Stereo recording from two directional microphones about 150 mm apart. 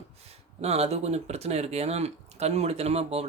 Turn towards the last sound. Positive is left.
turn(degrees=-45)  # may be behind; listen again after turning